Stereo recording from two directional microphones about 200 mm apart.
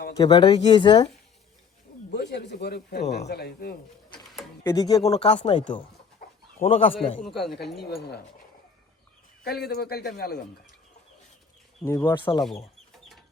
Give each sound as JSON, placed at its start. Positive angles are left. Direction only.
{"t": 0.2, "sound": "speech", "side_deg": 20}
{"t": 2.0, "sound": "speech", "side_deg": 55}
{"t": 4.6, "sound": "speech", "side_deg": 20}
{"t": 5.1, "sound": "speech", "side_deg": 30}
{"t": 6.2, "sound": "bird", "side_deg": 50}
{"t": 6.6, "sound": "speech", "side_deg": 30}
{"t": 7.8, "sound": "speech", "side_deg": 55}
{"t": 9.6, "sound": "speech", "side_deg": 50}
{"t": 11.8, "sound": "speech", "side_deg": 15}
{"t": 12.1, "sound": "speech", "side_deg": 25}